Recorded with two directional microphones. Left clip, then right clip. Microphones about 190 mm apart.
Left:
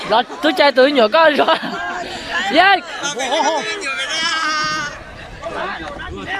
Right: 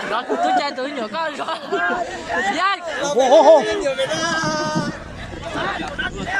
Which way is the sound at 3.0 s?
25° right (ahead or behind).